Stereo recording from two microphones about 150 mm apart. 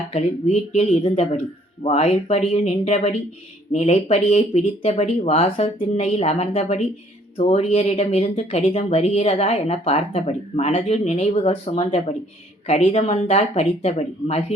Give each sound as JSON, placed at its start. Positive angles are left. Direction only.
{"t": 0.1, "sound": "speech", "side_deg": 45}